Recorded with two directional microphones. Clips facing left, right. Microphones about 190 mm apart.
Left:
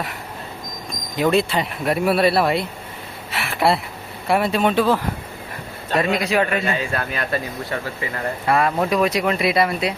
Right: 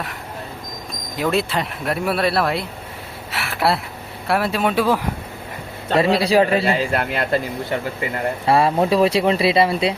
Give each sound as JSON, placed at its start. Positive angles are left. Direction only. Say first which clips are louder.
{"t": 1.2, "sound": "speech", "louder": "left 2 dB", "side_deg": 0}
{"t": 3.3, "sound": "a sound", "louder": "left 1 dB", "side_deg": 0}
{"t": 4.3, "sound": "speech", "louder": "left 1 dB", "side_deg": 0}
{"t": 5.9, "sound": "a man's voice", "louder": "right 4 dB", "side_deg": -30}